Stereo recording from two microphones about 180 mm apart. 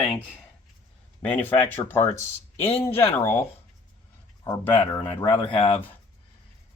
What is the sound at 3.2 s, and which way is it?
Speech, 15° left (ahead or behind).